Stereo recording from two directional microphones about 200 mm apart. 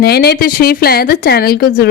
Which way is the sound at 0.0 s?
50° left (ahead or behind).